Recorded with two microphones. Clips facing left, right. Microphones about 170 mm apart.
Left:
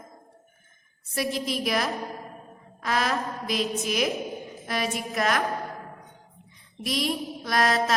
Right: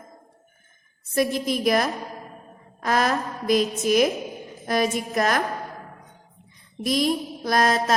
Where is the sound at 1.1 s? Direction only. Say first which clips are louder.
Right 5 dB; 45° right (ahead or behind).